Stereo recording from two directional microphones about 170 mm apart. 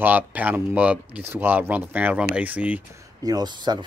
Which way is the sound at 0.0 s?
10° right (ahead or behind).